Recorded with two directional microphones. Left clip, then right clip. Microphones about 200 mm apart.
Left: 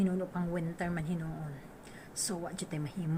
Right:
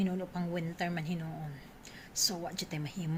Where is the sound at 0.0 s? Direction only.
10° right (ahead or behind).